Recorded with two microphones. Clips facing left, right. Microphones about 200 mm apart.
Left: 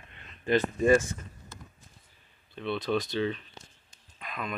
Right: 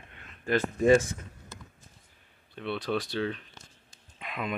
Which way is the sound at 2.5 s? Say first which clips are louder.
Left 2 dB; 10° right (ahead or behind).